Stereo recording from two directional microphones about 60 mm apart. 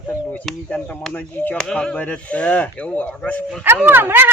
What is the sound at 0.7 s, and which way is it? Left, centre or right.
Speech, left.